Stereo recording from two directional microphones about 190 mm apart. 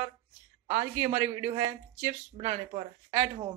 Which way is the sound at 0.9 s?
15° right (ahead or behind).